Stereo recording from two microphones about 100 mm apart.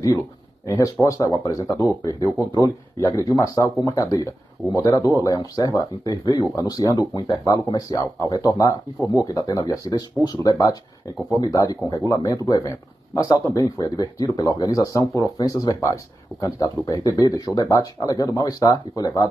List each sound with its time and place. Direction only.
0.7 s speech: 35° left (ahead or behind)